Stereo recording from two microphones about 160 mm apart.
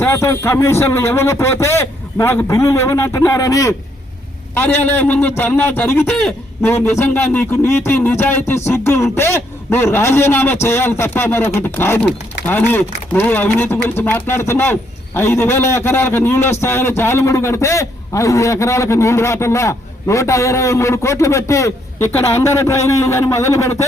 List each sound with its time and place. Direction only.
0.0 s speech: 15° left (ahead or behind)